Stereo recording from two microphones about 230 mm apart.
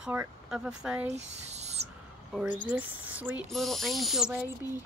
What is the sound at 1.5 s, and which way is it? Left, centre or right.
Owl, right.